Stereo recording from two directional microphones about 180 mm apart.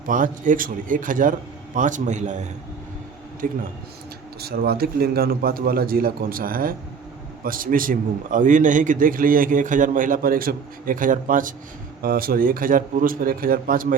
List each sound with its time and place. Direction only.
0.0 s a man's voice: 45° right (ahead or behind)
4.4 s a man's voice: 60° right (ahead or behind)